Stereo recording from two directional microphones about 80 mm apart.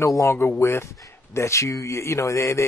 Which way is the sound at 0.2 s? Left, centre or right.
Left.